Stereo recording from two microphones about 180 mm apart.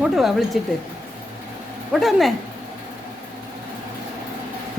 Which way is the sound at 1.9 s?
Centre (ahead or behind).